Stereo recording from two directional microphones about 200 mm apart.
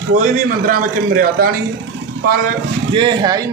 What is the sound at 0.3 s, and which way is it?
A man's voice, 45° right (ahead or behind).